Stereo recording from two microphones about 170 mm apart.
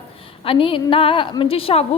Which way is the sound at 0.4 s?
30° left (ahead or behind).